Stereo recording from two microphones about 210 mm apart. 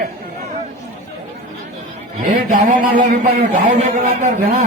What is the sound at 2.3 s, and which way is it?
A man's voice, 40° right (ahead or behind).